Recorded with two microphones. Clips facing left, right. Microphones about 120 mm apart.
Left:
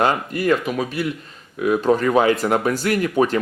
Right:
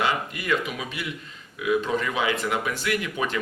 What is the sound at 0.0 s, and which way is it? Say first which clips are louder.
Speech: left 7 dB; 45° left (ahead or behind).